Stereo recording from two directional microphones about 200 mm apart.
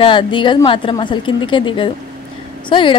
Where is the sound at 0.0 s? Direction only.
25° left (ahead or behind).